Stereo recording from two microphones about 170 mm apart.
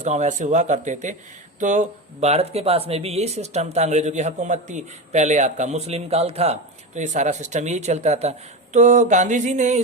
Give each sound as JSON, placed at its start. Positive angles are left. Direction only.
{"t": 0.0, "sound": "speech", "side_deg": -45}